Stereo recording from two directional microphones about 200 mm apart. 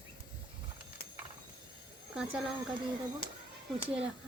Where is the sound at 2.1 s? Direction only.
5° right (ahead or behind).